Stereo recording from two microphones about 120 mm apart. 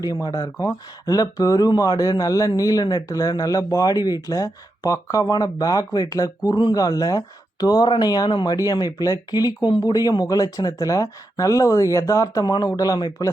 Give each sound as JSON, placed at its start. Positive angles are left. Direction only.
{"t": 0.0, "sound": "speech", "side_deg": 30}